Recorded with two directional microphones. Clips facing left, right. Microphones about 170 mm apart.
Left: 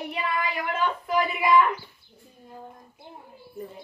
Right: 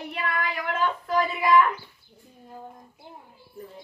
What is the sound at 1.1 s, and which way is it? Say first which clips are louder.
Speech: even; 10° left (ahead or behind).